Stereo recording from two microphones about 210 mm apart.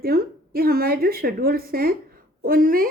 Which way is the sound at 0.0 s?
45° right (ahead or behind).